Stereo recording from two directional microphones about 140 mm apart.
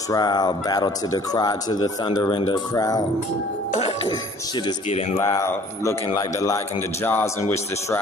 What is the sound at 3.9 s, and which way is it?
Music, 30° left (ahead or behind).